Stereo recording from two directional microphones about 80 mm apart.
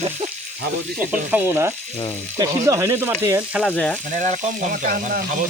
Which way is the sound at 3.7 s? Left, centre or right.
Centre.